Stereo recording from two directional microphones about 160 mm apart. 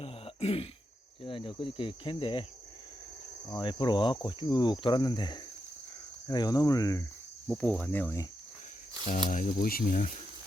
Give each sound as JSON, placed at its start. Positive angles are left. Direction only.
{"t": 0.0, "sound": "throat clearing", "side_deg": 40}
{"t": 1.2, "sound": "cricket", "side_deg": 35}
{"t": 3.5, "sound": "speech", "side_deg": 30}
{"t": 7.4, "sound": "cricket", "side_deg": 5}
{"t": 9.3, "sound": "speech", "side_deg": 60}